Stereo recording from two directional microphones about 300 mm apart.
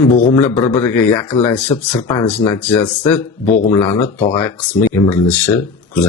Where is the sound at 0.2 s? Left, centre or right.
Centre.